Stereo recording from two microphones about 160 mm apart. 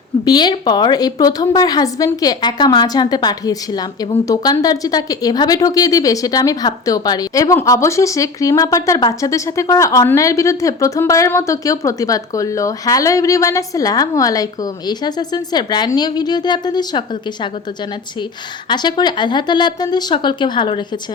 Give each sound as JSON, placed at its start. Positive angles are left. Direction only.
{"t": 0.3, "sound": "a woman's voice", "side_deg": 25}
{"t": 18.7, "sound": "a woman's voice", "side_deg": 30}